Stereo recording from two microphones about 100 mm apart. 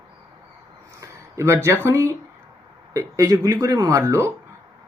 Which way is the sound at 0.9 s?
30° right (ahead or behind).